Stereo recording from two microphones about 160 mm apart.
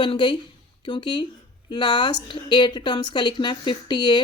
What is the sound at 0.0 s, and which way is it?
A woman's voice, 30° left (ahead or behind).